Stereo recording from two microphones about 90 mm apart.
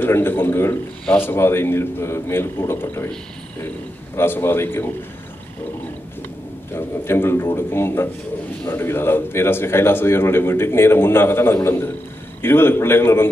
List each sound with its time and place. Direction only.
0.0 s a man's voice: 25° left (ahead or behind)
4.2 s a man's voice: 25° left (ahead or behind)
6.7 s a man's voice: 25° left (ahead or behind)